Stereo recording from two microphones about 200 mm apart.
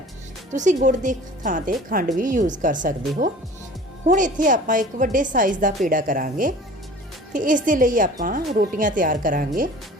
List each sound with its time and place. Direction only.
0.5 s a woman's voice: 40° right (ahead or behind)
4.0 s a woman's voice: 40° right (ahead or behind)